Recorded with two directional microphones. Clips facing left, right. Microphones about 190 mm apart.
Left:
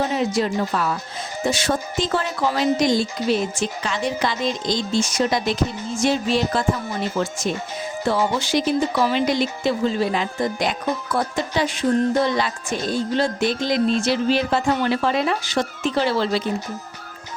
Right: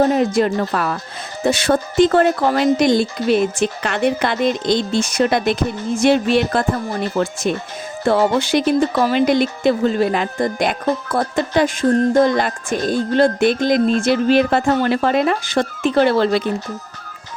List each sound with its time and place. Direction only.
0.0 s speech: 50° right (ahead or behind)
7.2 s speech: 40° right (ahead or behind)
8.0 s speech: 60° right (ahead or behind)